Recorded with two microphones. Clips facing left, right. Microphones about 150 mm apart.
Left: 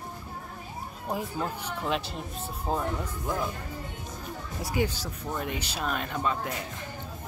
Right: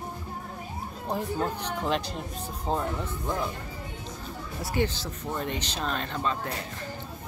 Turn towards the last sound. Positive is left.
turn(degrees=10)  # may be behind; listen again after turning